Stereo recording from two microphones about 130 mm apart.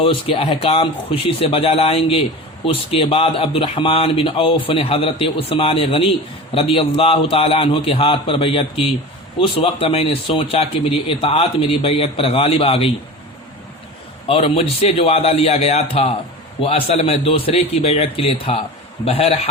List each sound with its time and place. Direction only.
0.0 s a man's voice: 45° left (ahead or behind)
14.3 s a man's voice: 45° left (ahead or behind)